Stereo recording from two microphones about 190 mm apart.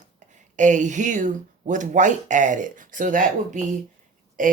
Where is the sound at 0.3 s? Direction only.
40° right (ahead or behind).